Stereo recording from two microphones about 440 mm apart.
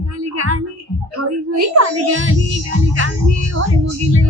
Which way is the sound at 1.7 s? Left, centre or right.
Right.